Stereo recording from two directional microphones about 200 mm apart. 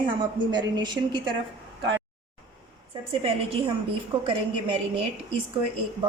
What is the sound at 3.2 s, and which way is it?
A woman's voice, 30° right (ahead or behind).